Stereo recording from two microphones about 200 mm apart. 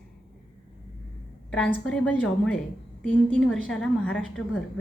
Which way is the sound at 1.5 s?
5° left (ahead or behind).